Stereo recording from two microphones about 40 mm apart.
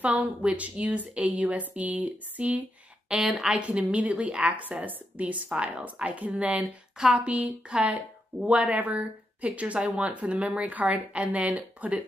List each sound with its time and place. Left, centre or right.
0.0 s a woman's voice: right
3.2 s a woman's voice: centre
3.4 s a woman's voice: right
5.2 s a woman's voice: right